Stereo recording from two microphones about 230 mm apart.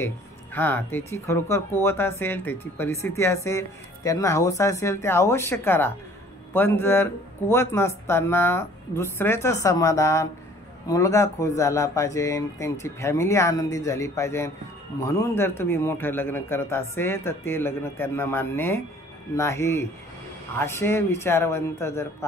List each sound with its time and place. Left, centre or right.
0.0 s speech: centre